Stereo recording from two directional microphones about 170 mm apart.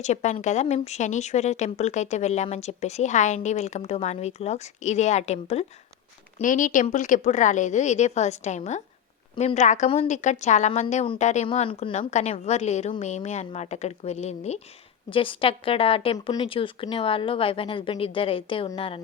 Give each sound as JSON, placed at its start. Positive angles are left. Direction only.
{"t": 0.0, "sound": "speech", "side_deg": 45}